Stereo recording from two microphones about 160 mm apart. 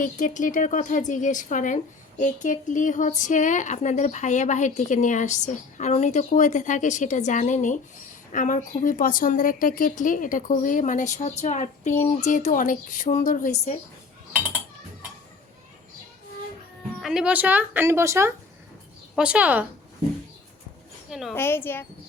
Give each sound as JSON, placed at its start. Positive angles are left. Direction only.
{"t": 0.0, "sound": "a woman's voice", "side_deg": 55}
{"t": 17.0, "sound": "a woman's voice", "side_deg": -5}
{"t": 21.1, "sound": "a woman's voice", "side_deg": 0}
{"t": 21.3, "sound": "speech", "side_deg": 15}